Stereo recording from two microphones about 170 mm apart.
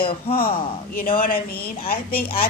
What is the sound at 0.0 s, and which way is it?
Speech, 35° left (ahead or behind).